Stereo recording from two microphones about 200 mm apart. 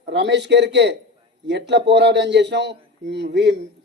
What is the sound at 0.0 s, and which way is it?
A man's voice, 60° right (ahead or behind).